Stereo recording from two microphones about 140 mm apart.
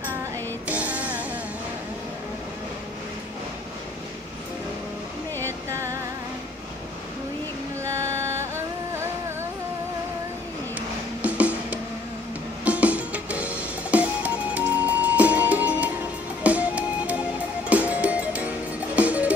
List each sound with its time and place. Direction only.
0.7 s music: 10° right (ahead or behind)
5.7 s music: 20° right (ahead or behind)
7.8 s music: 20° right (ahead or behind)
11.2 s music: 10° right (ahead or behind)